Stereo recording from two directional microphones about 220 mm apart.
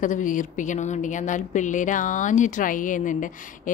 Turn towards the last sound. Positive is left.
turn(degrees=35)  # may be behind; listen again after turning